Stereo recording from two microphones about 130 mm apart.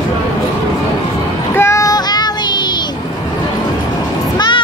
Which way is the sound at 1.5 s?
20° left (ahead or behind).